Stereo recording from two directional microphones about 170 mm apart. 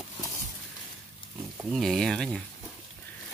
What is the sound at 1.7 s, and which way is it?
Speech, centre (ahead or behind).